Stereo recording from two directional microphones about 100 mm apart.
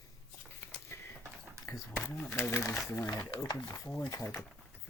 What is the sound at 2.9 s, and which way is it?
Speech, 35° left (ahead or behind).